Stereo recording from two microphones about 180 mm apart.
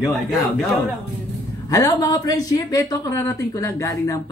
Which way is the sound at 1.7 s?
20° left (ahead or behind).